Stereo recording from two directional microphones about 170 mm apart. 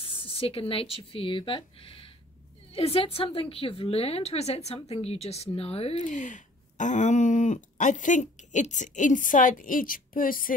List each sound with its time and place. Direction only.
0.0 s a woman's voice: 30° left (ahead or behind); by 10.5 s 55° left (ahead or behind)